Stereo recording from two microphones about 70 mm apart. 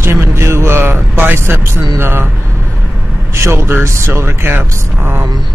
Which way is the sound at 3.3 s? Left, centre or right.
Right.